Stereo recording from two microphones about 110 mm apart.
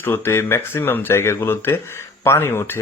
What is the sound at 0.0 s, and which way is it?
Speech, 20° left (ahead or behind).